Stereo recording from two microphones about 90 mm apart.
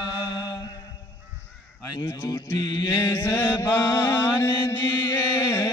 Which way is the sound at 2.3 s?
55° left (ahead or behind).